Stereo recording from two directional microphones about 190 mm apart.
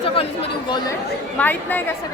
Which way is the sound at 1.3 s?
10° left (ahead or behind).